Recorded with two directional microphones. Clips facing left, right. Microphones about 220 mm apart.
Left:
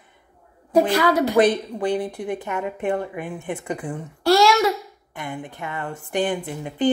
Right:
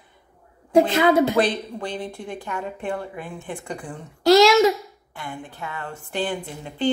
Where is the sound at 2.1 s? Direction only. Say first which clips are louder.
Left 5 dB; 20° left (ahead or behind).